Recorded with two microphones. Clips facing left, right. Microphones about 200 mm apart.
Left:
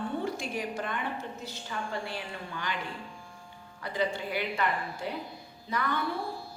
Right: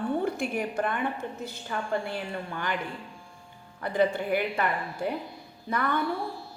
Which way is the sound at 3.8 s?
55° right (ahead or behind).